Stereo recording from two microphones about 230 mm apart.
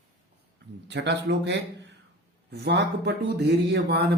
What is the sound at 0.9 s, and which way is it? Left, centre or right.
Speech, right.